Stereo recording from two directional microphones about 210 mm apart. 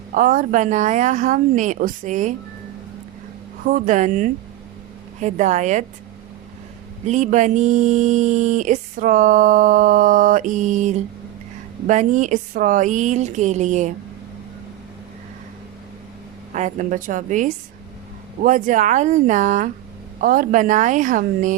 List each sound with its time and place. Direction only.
0.1 s speech: 40° right (ahead or behind)
3.7 s speech: 40° right (ahead or behind)
7.1 s speech: 35° right (ahead or behind)
16.6 s speech: 35° right (ahead or behind)